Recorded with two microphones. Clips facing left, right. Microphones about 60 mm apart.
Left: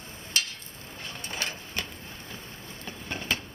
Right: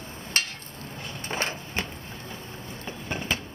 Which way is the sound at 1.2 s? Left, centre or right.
Right.